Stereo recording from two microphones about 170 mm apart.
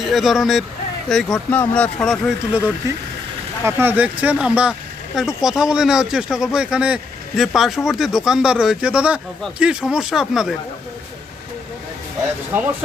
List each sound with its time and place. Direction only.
0.0 s speech: centre (ahead or behind)
2.8 s speech: 20° right (ahead or behind); by 10.5 s centre (ahead or behind)